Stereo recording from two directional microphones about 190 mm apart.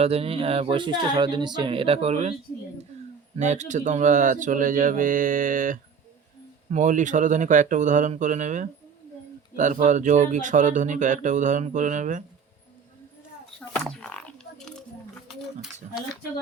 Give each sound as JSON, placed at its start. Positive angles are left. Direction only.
{"t": 0.0, "sound": "speech", "side_deg": -30}
{"t": 3.3, "sound": "speech", "side_deg": -40}
{"t": 13.7, "sound": "a sound", "side_deg": 5}
{"t": 15.4, "sound": "speech", "side_deg": 0}